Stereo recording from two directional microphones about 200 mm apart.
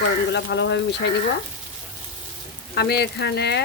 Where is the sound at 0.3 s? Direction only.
60° left (ahead or behind).